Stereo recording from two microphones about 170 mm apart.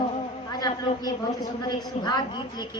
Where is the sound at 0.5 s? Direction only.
25° left (ahead or behind).